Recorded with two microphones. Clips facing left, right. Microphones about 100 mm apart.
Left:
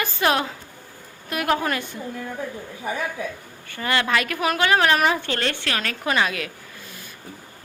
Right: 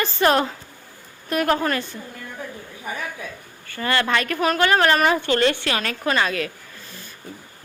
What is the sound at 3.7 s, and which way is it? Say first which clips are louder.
A woman's voice: right 1 dB; 15° left (ahead or behind).